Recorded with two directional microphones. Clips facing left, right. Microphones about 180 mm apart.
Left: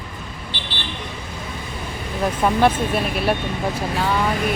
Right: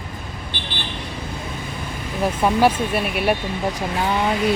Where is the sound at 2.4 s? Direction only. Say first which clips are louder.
Even; 10° right (ahead or behind).